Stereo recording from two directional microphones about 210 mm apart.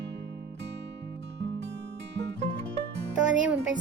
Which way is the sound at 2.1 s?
55° right (ahead or behind).